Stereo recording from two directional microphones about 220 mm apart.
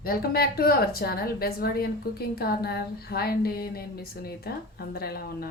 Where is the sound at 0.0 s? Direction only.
45° left (ahead or behind).